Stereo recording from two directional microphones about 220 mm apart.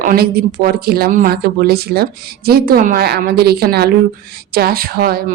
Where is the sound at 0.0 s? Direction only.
40° right (ahead or behind).